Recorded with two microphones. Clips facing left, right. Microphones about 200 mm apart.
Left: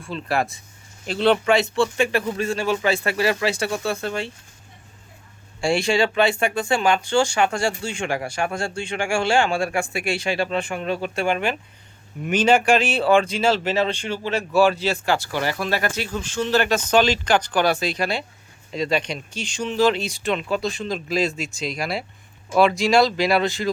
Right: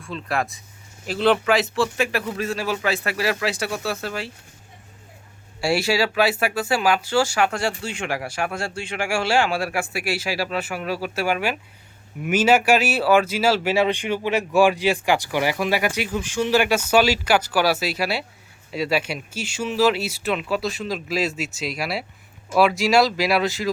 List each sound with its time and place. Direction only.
0.0 s speech: centre (ahead or behind)
5.5 s speech: 5° right (ahead or behind)